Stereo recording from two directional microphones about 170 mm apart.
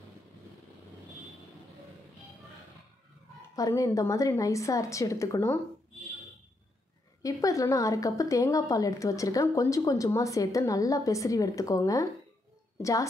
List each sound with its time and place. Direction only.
3.5 s a woman's voice: 20° left (ahead or behind)
7.2 s a woman's voice: 20° left (ahead or behind)